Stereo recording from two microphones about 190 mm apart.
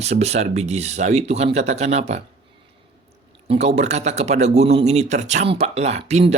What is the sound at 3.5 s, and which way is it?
Speech, 35° right (ahead or behind).